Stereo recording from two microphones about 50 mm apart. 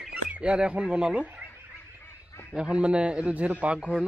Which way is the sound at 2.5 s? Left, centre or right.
Centre.